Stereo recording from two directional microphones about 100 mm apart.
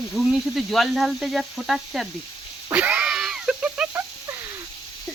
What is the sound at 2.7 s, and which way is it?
Cat, 15° right (ahead or behind).